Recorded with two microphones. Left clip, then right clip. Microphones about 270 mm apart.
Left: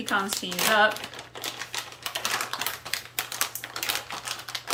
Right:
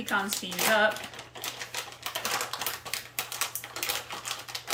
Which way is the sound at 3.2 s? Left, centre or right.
Centre.